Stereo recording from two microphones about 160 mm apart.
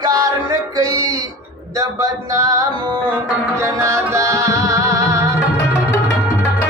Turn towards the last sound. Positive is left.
turn(degrees=-20)  # may be behind; listen again after turning